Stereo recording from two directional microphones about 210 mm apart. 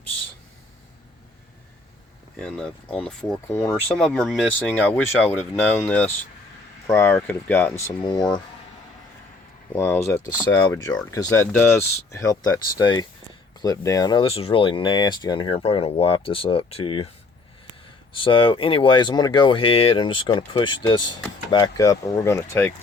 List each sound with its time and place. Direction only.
2.3 s speech: 5° left (ahead or behind)
8.0 s speech: 20° left (ahead or behind)
9.7 s speech: 10° left (ahead or behind)
18.1 s speech: 25° left (ahead or behind)